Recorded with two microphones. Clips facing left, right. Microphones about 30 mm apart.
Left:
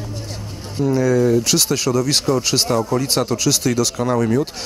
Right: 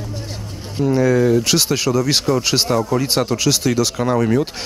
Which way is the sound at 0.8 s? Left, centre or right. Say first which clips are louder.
Right 1 dB; centre.